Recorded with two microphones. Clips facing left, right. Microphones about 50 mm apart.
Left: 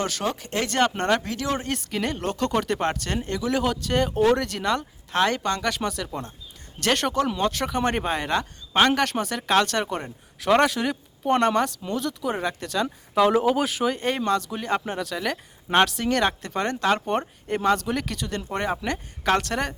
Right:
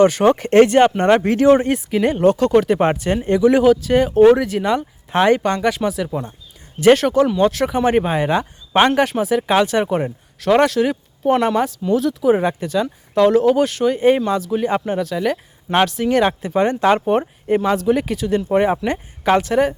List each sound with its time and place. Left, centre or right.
0.0 s speech: right
0.3 s speech: right
0.7 s speech: centre
1.1 s speech: right
1.7 s speech: centre
3.6 s speech: centre
10.4 s speech: centre
13.1 s speech: centre